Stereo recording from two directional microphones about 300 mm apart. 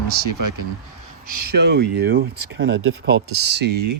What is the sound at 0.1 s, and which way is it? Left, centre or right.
Speech, right.